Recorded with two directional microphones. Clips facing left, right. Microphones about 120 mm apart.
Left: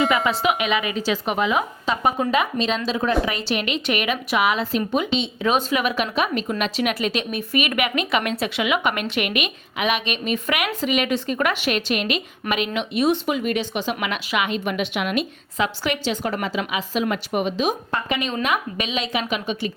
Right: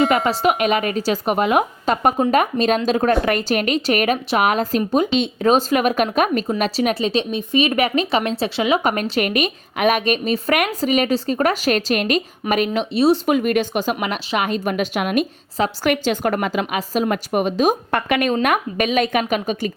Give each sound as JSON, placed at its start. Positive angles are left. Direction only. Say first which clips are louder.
{"t": 0.3, "sound": "a woman's voice", "louder": "right 4 dB", "side_deg": -45}
{"t": 6.6, "sound": "speech", "louder": "right 2 dB", "side_deg": -35}
{"t": 13.2, "sound": "a woman's voice", "louder": "right 5 dB", "side_deg": -50}
{"t": 17.9, "sound": "a woman's voice", "louder": "right 6 dB", "side_deg": -60}